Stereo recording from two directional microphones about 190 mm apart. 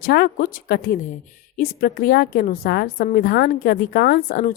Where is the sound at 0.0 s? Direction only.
55° left (ahead or behind).